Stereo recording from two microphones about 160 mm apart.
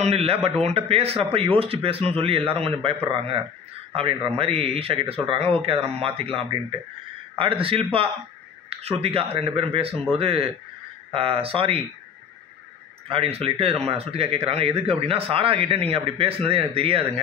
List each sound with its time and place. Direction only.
0.0 s speech: 40° right (ahead or behind)
13.1 s speech: 35° right (ahead or behind)